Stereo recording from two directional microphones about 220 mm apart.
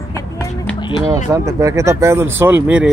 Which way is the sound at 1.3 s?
15° right (ahead or behind).